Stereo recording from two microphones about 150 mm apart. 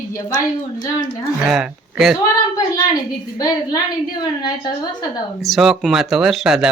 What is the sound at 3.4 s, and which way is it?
A woman's voice, 25° left (ahead or behind).